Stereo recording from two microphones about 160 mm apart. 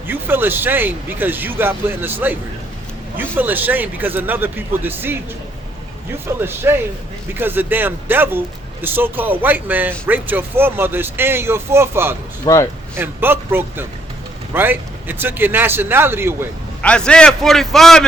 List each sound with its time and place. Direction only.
0.1 s speech: 10° right (ahead or behind)
12.5 s speech: 25° left (ahead or behind)
13.0 s speech: 15° right (ahead or behind)
16.8 s a man's voice: 5° left (ahead or behind)